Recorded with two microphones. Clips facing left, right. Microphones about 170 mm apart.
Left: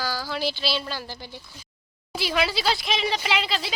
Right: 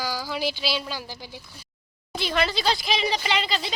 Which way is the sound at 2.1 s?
5° left (ahead or behind).